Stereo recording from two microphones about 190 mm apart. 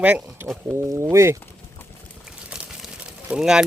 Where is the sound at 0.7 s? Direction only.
15° right (ahead or behind).